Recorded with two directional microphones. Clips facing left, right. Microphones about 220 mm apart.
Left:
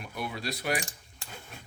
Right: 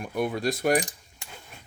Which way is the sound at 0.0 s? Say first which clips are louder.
Right 9 dB; 50° right (ahead or behind).